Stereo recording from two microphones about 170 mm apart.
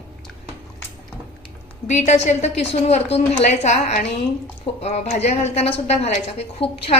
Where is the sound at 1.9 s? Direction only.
40° left (ahead or behind).